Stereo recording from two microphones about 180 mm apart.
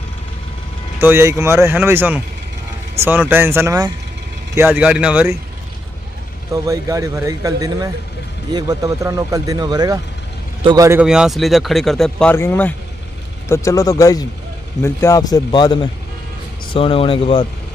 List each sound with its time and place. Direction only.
1.0 s speech: 15° right (ahead or behind)
6.5 s speech: 20° right (ahead or behind)
10.9 s speech: 5° right (ahead or behind); by 17.5 s 30° left (ahead or behind)